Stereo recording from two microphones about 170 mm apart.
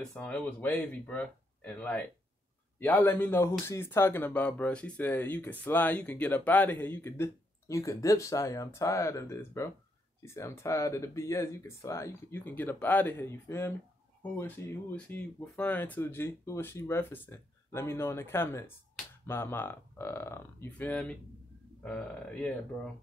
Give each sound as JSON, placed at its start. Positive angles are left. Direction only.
{"t": 0.1, "sound": "speech", "side_deg": 5}